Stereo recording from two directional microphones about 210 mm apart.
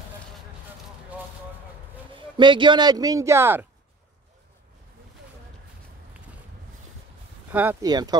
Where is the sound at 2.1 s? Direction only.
20° right (ahead or behind).